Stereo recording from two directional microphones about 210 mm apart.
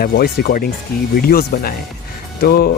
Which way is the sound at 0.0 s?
45° left (ahead or behind).